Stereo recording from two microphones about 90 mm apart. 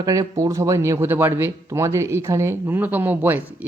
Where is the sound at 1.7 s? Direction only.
35° right (ahead or behind).